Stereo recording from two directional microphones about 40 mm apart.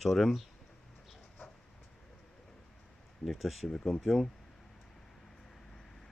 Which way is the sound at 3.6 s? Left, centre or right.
Centre.